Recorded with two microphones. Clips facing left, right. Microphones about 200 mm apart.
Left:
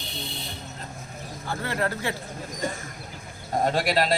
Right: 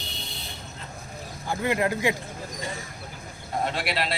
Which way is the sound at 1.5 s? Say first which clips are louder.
Right 3 dB; 15° right (ahead or behind).